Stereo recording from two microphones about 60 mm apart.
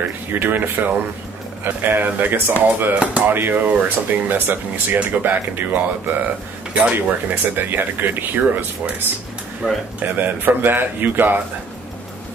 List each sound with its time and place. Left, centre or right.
0.3 s speech: right
9.6 s speech: centre
10.1 s speech: right